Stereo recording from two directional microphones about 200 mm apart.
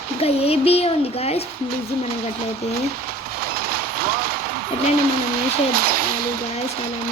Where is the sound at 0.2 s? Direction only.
30° left (ahead or behind).